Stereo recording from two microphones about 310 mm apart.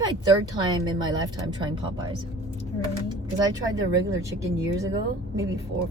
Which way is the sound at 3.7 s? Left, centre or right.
Centre.